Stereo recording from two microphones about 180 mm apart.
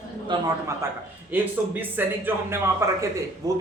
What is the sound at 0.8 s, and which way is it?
A man's voice, 15° right (ahead or behind).